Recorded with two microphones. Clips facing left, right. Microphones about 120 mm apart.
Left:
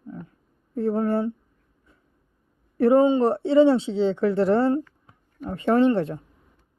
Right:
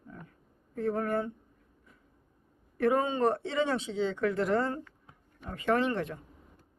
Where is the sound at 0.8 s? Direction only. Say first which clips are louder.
Left 7 dB; 30° left (ahead or behind).